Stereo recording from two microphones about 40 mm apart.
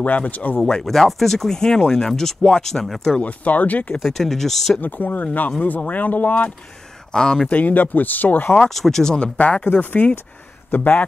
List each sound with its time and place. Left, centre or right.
0.0 s speech: left
0.8 s speech: centre
3.2 s speech: left
4.0 s speech: centre
4.7 s speech: left
7.1 s speech: centre
7.4 s speech: left
8.6 s speech: centre
9.1 s speech: left